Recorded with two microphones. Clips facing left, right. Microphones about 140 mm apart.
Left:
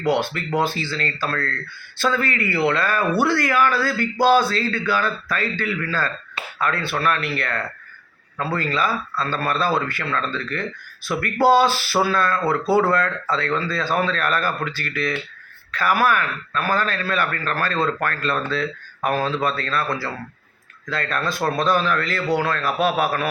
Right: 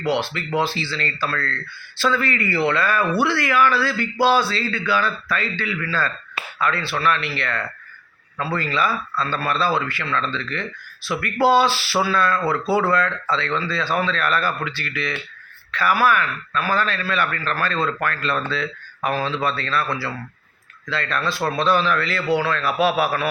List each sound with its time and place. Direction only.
0.0 s a man's voice: 45° left (ahead or behind)